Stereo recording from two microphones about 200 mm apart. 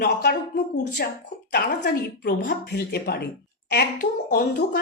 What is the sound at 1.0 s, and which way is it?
A woman's voice, 50° left (ahead or behind).